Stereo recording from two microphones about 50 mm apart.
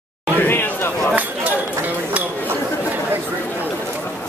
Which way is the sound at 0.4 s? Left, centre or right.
Left.